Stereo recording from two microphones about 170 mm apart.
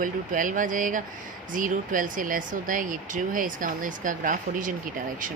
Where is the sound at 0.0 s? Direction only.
50° right (ahead or behind).